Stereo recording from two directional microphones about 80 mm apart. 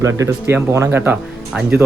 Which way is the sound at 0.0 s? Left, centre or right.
Right.